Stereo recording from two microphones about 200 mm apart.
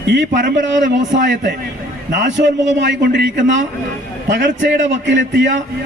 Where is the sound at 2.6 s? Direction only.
65° right (ahead or behind).